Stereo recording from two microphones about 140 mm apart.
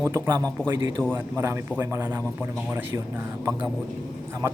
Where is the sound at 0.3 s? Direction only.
25° right (ahead or behind).